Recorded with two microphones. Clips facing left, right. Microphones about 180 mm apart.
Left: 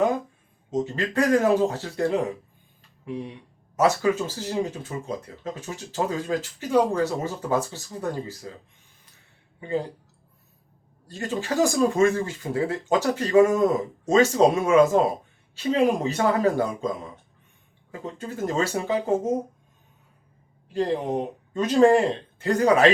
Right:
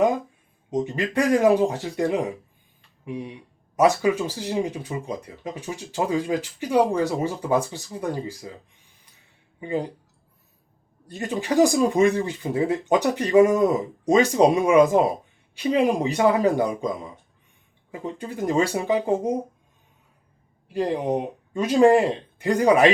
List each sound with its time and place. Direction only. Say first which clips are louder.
0.7 s speech: right 1 dB; 15° right (ahead or behind)
9.6 s speech: right 1 dB; 15° right (ahead or behind)
11.1 s speech: right 3 dB; 15° right (ahead or behind)
20.7 s speech: right 1 dB; 15° right (ahead or behind)